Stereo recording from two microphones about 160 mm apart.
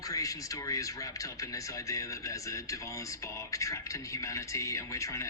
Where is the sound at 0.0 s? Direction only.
20° left (ahead or behind).